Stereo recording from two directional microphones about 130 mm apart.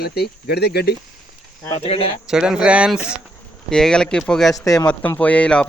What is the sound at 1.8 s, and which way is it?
Speech, 50° left (ahead or behind).